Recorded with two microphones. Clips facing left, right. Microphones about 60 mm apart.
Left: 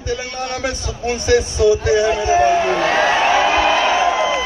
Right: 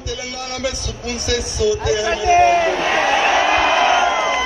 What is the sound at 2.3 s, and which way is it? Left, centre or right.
Speech, right.